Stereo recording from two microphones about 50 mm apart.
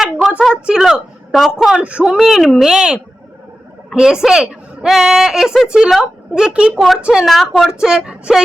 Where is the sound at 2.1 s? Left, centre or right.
Centre.